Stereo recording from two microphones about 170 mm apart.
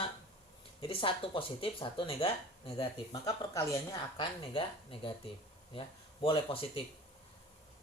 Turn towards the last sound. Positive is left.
turn(degrees=30)  # may be behind; listen again after turning